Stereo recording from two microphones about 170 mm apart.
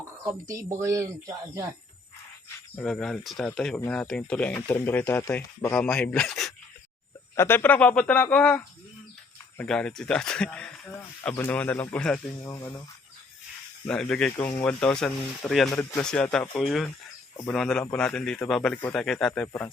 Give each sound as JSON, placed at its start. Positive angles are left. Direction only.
{"t": 0.4, "sound": "speech", "side_deg": -20}
{"t": 2.7, "sound": "a man's voice", "side_deg": 5}
{"t": 13.8, "sound": "a man's voice", "side_deg": 5}